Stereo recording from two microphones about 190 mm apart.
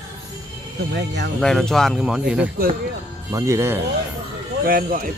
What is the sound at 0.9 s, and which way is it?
Speech, 65° right (ahead or behind).